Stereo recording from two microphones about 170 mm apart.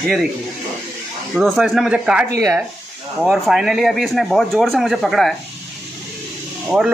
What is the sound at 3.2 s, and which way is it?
A man's voice, centre (ahead or behind).